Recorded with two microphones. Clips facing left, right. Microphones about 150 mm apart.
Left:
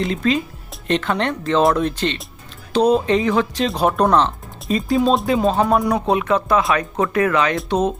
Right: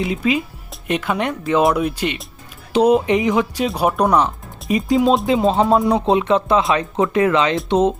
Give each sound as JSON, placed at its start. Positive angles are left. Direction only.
{"t": 0.0, "sound": "speech", "side_deg": -10}